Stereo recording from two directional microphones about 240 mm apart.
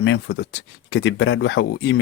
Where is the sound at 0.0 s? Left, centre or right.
Left.